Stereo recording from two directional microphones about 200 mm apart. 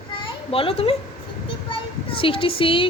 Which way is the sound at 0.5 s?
30° left (ahead or behind).